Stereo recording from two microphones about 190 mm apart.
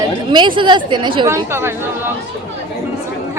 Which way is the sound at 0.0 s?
25° right (ahead or behind).